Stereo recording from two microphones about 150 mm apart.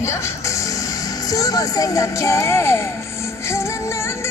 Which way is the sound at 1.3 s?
25° left (ahead or behind).